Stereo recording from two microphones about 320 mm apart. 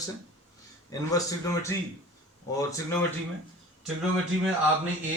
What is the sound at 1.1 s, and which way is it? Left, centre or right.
Speech, centre.